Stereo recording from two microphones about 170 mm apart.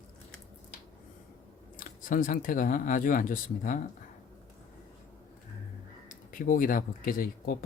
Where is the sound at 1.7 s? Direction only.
55° left (ahead or behind).